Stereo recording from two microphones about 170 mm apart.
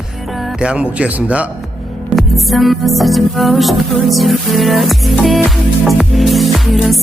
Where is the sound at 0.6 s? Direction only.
5° right (ahead or behind).